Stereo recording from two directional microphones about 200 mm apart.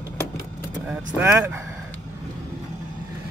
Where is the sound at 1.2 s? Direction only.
10° right (ahead or behind).